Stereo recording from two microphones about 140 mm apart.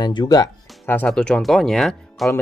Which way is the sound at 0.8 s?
10° left (ahead or behind).